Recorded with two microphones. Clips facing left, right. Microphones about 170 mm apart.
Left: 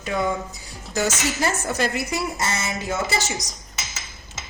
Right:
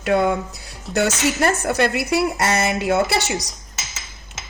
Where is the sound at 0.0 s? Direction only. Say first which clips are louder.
Right 6 dB; 65° right (ahead or behind).